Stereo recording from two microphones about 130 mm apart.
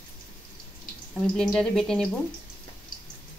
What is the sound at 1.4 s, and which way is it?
Speech, 5° left (ahead or behind).